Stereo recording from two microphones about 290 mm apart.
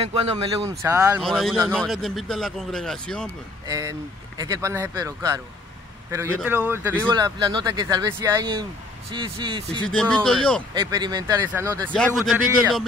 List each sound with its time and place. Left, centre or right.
0.0 s speech: centre
0.9 s speech: centre
1.2 s a man's voice: centre
3.6 s speech: centre
9.9 s a man's voice: centre
10.7 s speech: centre
11.9 s a man's voice: centre